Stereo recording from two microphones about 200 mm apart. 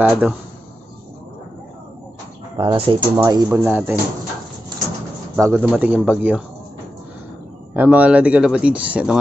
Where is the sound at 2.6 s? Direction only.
25° right (ahead or behind).